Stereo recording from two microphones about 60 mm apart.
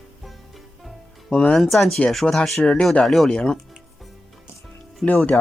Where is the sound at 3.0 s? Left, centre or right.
Centre.